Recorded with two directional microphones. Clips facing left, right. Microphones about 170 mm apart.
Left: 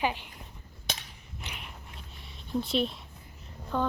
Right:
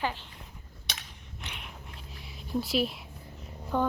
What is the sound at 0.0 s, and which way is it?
Speech, 15° left (ahead or behind).